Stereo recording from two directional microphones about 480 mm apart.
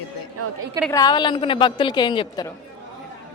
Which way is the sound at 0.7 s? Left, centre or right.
Centre.